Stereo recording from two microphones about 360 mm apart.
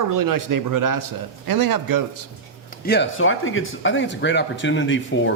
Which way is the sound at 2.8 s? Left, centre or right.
Left.